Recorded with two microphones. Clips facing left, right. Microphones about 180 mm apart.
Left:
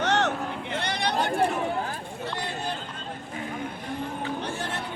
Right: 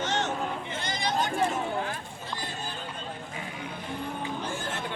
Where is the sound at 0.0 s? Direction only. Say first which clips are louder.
Left 4 dB; 65° left (ahead or behind).